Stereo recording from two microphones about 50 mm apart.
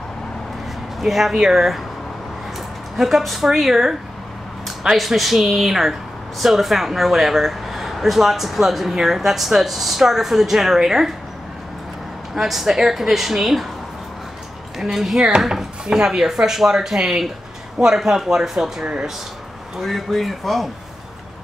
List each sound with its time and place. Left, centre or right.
1.0 s speech: centre
3.0 s speech: centre
12.4 s speech: centre
14.8 s speech: centre
15.1 s speech: centre